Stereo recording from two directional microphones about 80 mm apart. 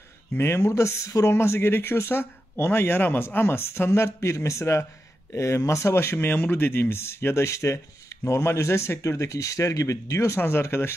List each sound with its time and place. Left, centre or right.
0.3 s speech: left